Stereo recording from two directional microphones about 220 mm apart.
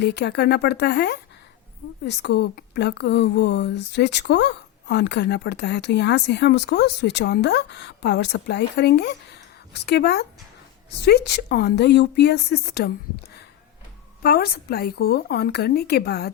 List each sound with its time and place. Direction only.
0.0 s speech: 50° left (ahead or behind)
14.2 s speech: 45° left (ahead or behind)